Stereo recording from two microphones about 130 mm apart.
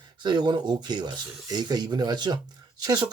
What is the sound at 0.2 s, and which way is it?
Speech, 35° right (ahead or behind).